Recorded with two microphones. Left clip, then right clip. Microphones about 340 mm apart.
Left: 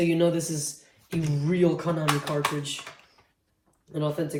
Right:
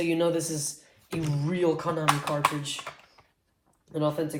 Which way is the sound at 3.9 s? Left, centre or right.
Centre.